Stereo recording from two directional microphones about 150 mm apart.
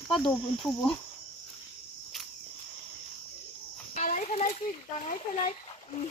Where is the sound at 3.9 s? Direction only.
55° left (ahead or behind).